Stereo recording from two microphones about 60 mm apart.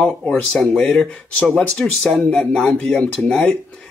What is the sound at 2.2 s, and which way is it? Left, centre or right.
Speech, centre.